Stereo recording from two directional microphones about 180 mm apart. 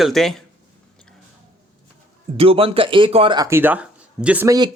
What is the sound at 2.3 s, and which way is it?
Speech, 30° right (ahead or behind).